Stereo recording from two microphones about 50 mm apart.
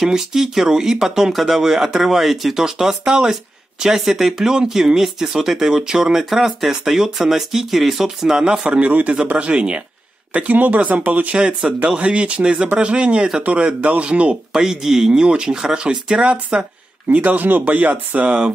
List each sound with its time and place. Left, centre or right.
0.0 s speech: centre
8.6 s speech: right
11.3 s speech: right